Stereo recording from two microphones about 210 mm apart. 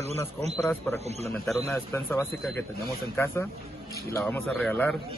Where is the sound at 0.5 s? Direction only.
Centre (ahead or behind).